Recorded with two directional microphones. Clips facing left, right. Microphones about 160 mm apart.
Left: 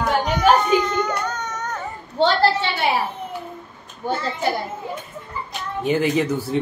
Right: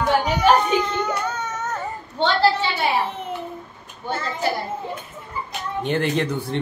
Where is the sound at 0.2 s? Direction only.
10° right (ahead or behind).